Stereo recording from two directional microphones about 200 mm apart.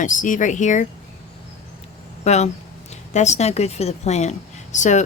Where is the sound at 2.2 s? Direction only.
35° left (ahead or behind).